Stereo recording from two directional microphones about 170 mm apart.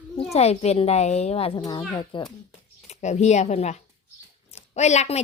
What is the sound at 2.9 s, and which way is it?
A woman's voice, 40° left (ahead or behind).